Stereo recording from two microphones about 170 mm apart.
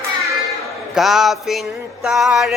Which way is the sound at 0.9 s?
Centre (ahead or behind).